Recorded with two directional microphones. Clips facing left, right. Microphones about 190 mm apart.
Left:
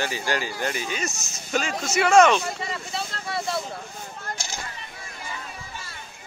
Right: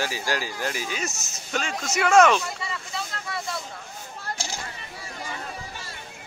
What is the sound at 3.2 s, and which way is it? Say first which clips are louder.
Speech: left 8 dB; 30° left (ahead or behind).